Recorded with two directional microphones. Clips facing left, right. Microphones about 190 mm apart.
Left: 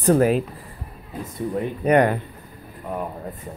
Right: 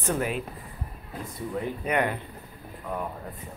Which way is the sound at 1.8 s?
40° left (ahead or behind).